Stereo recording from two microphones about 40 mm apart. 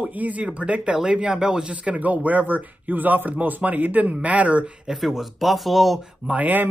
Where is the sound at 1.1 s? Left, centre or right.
Right.